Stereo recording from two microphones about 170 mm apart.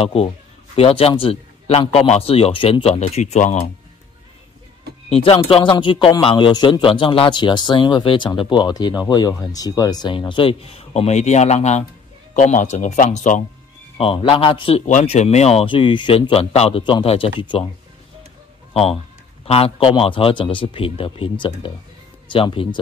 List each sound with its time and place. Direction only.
0.0 s speech: 35° left (ahead or behind)
5.1 s a man's voice: 35° left (ahead or behind)
13.9 s speech: 35° left (ahead or behind)
14.9 s a man's voice: 45° left (ahead or behind)
19.4 s speech: 35° left (ahead or behind)